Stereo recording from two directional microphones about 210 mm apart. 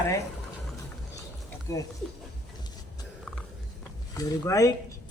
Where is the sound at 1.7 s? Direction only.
15° left (ahead or behind).